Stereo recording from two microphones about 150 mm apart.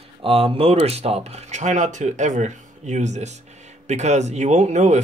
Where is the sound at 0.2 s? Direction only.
40° right (ahead or behind).